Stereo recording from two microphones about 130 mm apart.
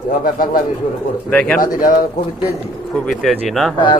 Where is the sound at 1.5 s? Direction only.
90° left.